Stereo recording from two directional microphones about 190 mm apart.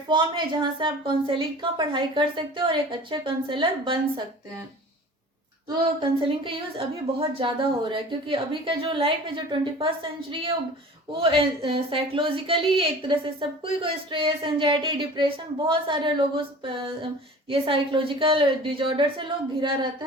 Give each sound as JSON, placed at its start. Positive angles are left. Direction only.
{"t": 0.1, "sound": "a woman's voice", "side_deg": -25}
{"t": 5.6, "sound": "a woman's voice", "side_deg": -25}